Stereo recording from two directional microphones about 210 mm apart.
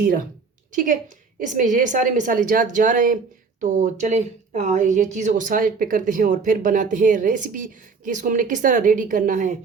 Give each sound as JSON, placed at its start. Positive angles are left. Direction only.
{"t": 0.7, "sound": "speech", "side_deg": -40}